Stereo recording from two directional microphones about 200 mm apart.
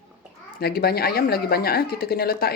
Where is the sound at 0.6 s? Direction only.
50° left (ahead or behind).